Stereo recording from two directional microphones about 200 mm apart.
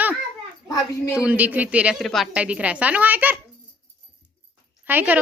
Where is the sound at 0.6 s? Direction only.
20° left (ahead or behind).